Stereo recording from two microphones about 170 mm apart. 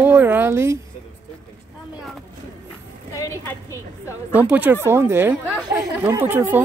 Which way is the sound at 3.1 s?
15° left (ahead or behind).